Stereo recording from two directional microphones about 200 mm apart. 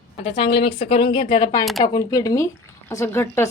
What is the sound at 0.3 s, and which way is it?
Speech, 25° left (ahead or behind).